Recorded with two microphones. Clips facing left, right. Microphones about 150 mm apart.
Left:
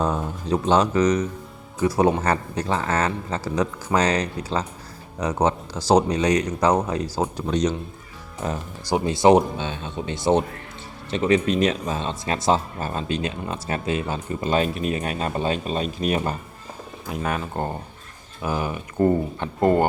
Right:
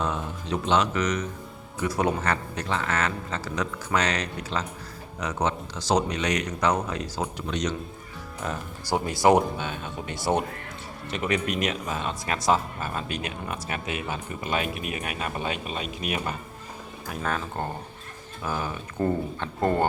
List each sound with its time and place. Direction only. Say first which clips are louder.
0.0 s speech: left 5 dB; 40° left (ahead or behind)
17.1 s speech: left 3 dB; 15° left (ahead or behind)